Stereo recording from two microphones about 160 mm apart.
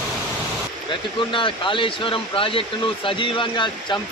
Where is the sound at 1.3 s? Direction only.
30° left (ahead or behind).